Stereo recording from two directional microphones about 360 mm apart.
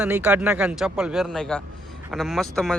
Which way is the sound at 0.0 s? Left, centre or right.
Centre.